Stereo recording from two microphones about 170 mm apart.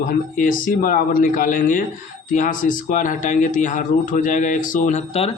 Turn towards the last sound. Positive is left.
turn(degrees=35)  # may be behind; listen again after turning